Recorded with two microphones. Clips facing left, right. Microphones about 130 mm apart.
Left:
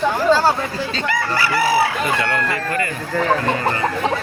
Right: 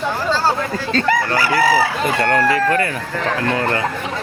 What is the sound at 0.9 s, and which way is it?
Speech, 45° right (ahead or behind).